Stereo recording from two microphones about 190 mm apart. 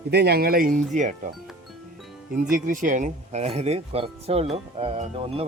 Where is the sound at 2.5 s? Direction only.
45° right (ahead or behind).